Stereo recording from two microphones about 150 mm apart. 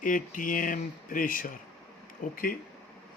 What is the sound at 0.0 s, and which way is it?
Speech, 65° left (ahead or behind).